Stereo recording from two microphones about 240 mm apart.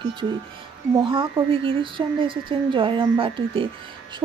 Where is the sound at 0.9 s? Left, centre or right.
Right.